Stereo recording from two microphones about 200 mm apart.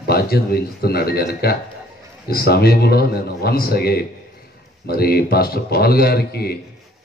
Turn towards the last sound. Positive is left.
turn(degrees=50)  # may be behind; listen again after turning